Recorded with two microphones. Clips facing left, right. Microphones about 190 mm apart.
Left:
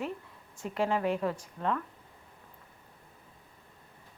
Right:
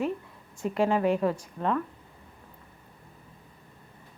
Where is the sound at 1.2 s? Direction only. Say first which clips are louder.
Right 4 dB; 40° right (ahead or behind).